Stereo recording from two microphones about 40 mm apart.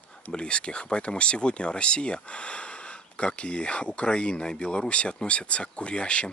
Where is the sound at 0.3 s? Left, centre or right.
Left.